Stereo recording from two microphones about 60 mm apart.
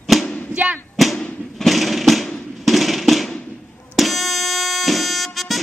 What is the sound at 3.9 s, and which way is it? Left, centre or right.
Music, centre.